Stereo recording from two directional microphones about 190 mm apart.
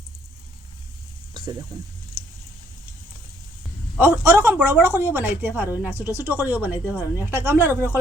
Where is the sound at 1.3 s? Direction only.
25° right (ahead or behind).